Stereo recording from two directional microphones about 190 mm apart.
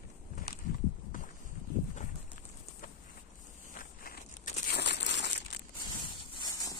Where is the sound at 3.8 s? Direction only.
50° left (ahead or behind); by 5.7 s 65° left (ahead or behind).